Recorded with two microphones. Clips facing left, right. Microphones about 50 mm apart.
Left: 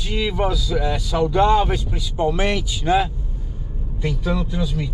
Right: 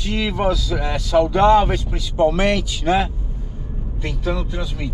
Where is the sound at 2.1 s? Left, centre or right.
Right.